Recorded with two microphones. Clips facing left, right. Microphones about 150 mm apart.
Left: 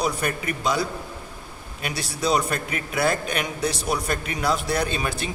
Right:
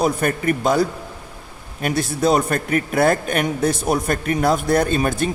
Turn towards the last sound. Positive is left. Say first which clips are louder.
# right 7 dB
turn(degrees=-50)  # may be behind; listen again after turning